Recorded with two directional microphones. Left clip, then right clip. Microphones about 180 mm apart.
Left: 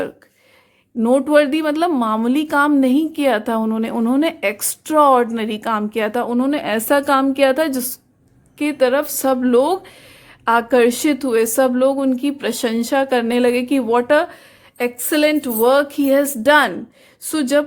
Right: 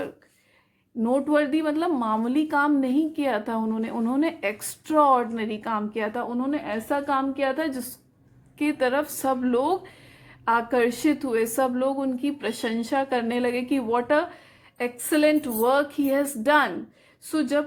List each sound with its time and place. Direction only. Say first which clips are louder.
1.0 s a woman's voice: left 9 dB; 35° left (ahead or behind)